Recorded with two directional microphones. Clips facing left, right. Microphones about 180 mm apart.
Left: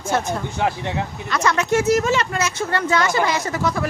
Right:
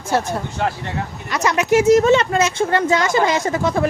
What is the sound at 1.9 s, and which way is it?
Speech, 30° right (ahead or behind).